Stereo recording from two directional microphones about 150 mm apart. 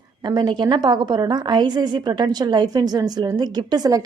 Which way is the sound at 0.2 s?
30° right (ahead or behind).